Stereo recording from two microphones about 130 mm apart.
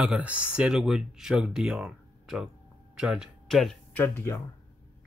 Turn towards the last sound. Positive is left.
turn(degrees=15)  # may be behind; listen again after turning